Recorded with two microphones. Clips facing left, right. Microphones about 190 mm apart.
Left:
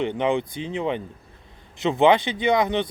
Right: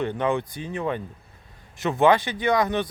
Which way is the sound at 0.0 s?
20° left (ahead or behind).